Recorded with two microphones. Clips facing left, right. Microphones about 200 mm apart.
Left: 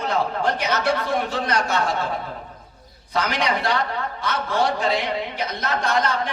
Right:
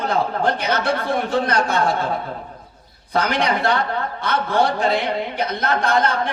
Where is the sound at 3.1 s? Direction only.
55° right (ahead or behind).